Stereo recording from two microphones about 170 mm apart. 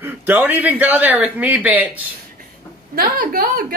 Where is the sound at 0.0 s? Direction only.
10° right (ahead or behind).